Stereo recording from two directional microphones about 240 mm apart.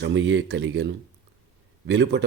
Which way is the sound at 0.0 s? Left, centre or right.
Right.